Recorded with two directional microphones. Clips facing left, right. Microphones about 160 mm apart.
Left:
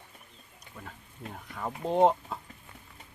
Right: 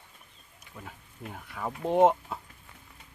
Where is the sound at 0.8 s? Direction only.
5° right (ahead or behind).